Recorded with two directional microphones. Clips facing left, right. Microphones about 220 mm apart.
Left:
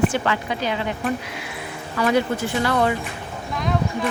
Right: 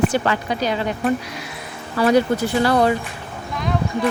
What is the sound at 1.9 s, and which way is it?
Speech, 35° right (ahead or behind).